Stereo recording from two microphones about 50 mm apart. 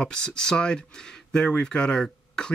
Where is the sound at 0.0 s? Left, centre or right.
Centre.